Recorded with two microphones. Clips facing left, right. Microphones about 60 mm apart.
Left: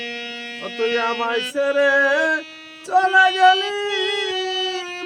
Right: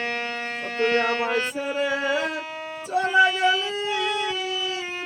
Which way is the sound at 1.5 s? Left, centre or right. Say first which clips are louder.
Left 9 dB; left.